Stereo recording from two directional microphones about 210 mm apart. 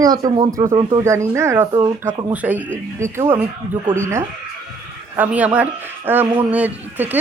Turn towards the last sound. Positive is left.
turn(degrees=-10)  # may be behind; listen again after turning